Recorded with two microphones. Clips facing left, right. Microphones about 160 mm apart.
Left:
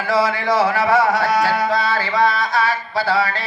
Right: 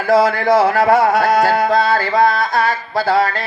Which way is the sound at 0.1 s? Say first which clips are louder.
Right 6 dB; 55° right (ahead or behind).